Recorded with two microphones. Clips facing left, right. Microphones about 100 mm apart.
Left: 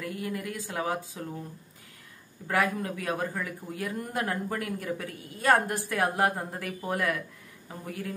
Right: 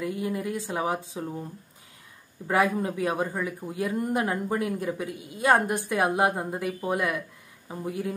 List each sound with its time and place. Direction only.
0.0 s a man's voice: 20° right (ahead or behind)
2.4 s a man's voice: 20° right (ahead or behind)